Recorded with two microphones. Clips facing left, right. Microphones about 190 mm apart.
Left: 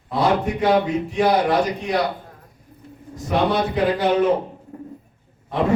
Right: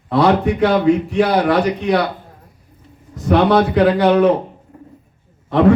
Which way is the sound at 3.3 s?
65° right (ahead or behind).